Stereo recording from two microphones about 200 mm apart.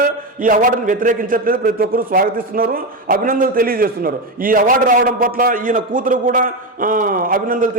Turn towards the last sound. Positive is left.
turn(degrees=-45)  # may be behind; listen again after turning